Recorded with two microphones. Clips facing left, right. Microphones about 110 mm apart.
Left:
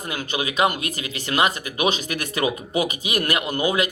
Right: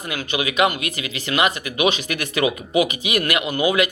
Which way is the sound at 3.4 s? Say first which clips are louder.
Right 2 dB; 10° right (ahead or behind).